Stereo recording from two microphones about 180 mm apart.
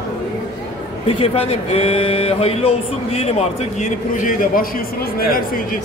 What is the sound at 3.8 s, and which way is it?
A man's voice, 45° left (ahead or behind).